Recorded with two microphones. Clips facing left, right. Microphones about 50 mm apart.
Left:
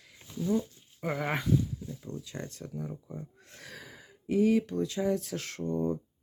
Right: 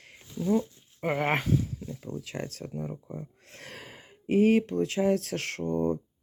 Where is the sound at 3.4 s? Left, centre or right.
Right.